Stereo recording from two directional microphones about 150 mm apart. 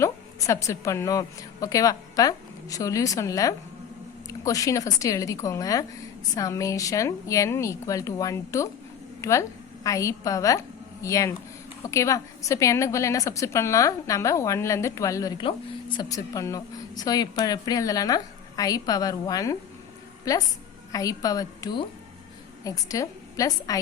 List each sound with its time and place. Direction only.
0.0 s a woman's voice: 20° left (ahead or behind)